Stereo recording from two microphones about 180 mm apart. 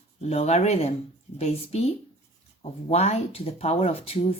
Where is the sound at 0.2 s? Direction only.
35° left (ahead or behind).